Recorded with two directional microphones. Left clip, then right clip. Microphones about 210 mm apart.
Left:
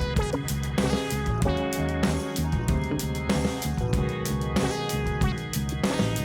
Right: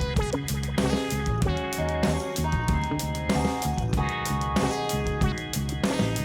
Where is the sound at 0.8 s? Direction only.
Centre (ahead or behind).